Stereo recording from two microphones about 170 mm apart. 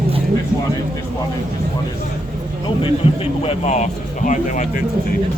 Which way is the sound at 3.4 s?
40° left (ahead or behind).